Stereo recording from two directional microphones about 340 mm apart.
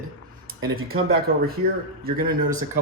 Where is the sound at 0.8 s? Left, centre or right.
Right.